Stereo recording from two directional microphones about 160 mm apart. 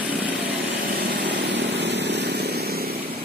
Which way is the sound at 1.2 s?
90° right.